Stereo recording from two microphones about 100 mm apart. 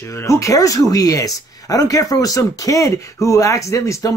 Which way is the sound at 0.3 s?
30° left (ahead or behind).